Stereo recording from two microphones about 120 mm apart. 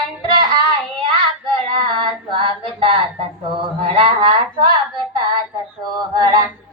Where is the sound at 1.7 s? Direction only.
45° right (ahead or behind).